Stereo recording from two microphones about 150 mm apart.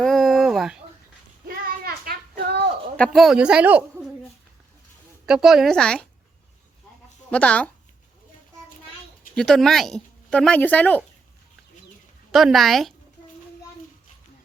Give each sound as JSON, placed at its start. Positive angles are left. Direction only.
{"t": 0.0, "sound": "a sound", "side_deg": 0}
{"t": 1.5, "sound": "a sound", "side_deg": -90}
{"t": 3.0, "sound": "a man's voice", "side_deg": 0}
{"t": 5.2, "sound": "a woman's voice", "side_deg": -5}
{"t": 7.3, "sound": "speech", "side_deg": 10}
{"t": 9.3, "sound": "a woman's voice", "side_deg": 5}
{"t": 12.3, "sound": "a woman's voice", "side_deg": 0}